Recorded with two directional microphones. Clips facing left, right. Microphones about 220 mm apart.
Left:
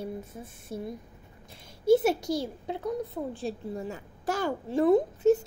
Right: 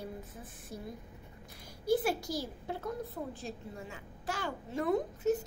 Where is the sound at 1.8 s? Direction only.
25° left (ahead or behind).